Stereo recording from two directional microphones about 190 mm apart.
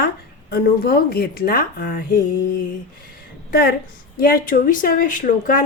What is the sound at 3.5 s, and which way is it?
A woman's voice, 55° left (ahead or behind).